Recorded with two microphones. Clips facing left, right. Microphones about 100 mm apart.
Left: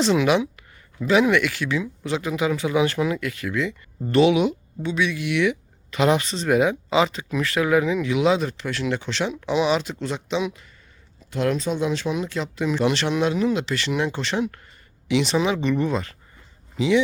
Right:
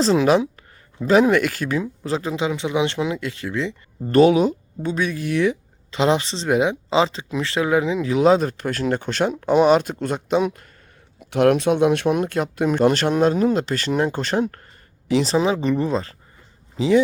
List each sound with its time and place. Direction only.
0.0 s speech: 35° right (ahead or behind)
4.1 s speech: 40° right (ahead or behind)
11.3 s speech: 65° right (ahead or behind); by 17.0 s 35° right (ahead or behind)